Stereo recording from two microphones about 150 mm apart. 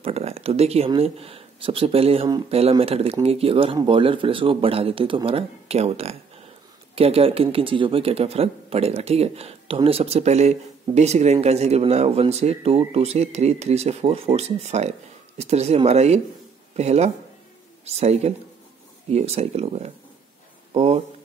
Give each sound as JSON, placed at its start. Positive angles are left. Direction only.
{"t": 0.0, "sound": "speech", "side_deg": -45}